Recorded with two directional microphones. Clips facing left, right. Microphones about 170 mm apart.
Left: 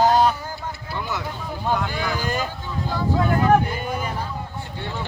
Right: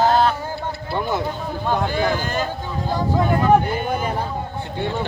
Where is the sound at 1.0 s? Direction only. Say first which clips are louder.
Right 5 dB; 50° right (ahead or behind).